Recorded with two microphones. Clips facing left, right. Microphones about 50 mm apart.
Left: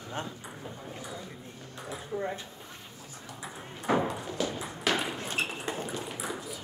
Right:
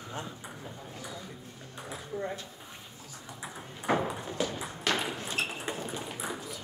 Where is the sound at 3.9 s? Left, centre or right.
Right.